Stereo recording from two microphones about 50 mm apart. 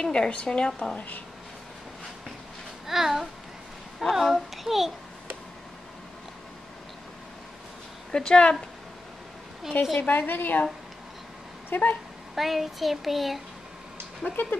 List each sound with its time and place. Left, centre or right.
0.0 s speech: centre
2.9 s a child's voice: centre
4.1 s child singing: centre
8.1 s speech: centre
10.0 s a woman's voice: left
11.7 s a woman's voice: left
12.4 s child singing: centre
14.4 s cat: left